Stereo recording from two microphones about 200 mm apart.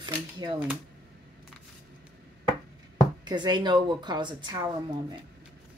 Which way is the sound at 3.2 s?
20° right (ahead or behind).